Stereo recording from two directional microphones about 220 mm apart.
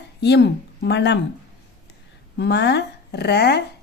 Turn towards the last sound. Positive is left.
turn(degrees=50)  # may be behind; listen again after turning